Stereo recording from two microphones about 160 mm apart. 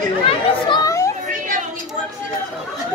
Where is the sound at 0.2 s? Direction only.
35° left (ahead or behind).